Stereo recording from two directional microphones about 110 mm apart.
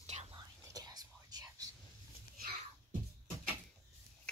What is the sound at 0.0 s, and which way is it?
Whispering, 75° right (ahead or behind).